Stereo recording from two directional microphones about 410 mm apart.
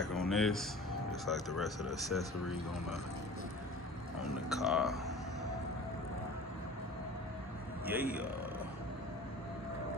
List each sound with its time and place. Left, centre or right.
0.0 s a sound: centre
1.2 s speech: centre
4.4 s speech: centre
7.9 s speech: centre